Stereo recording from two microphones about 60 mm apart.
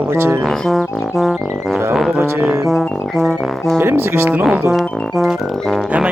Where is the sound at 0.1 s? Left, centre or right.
Right.